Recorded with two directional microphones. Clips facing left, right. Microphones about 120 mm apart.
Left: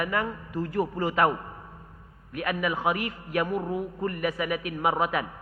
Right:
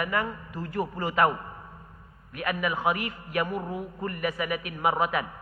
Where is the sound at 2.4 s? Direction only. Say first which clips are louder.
Even; 25° left (ahead or behind).